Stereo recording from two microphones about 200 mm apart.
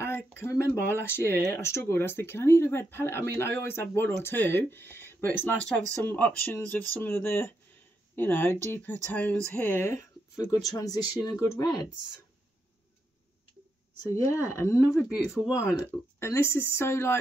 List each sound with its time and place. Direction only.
0.0 s speech: 10° left (ahead or behind)
14.3 s speech: 15° left (ahead or behind)